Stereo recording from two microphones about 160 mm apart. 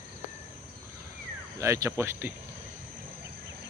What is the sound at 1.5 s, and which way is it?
Speech, 20° right (ahead or behind).